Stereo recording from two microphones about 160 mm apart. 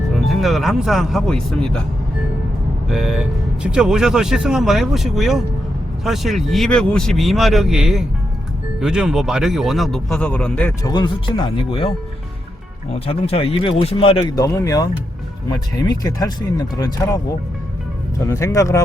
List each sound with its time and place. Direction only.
0.1 s speech: centre (ahead or behind)
2.9 s speech: 5° right (ahead or behind)
10.8 s speech: 25° left (ahead or behind)
14.3 s speech: 20° left (ahead or behind)
18.3 s speech: 20° left (ahead or behind)